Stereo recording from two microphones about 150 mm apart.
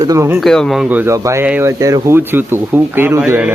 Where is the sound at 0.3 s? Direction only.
5° left (ahead or behind).